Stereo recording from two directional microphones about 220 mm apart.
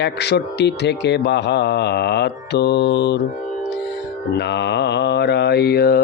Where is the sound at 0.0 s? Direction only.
50° left (ahead or behind).